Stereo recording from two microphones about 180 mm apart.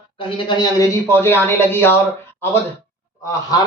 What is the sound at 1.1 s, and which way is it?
Speech, 15° left (ahead or behind).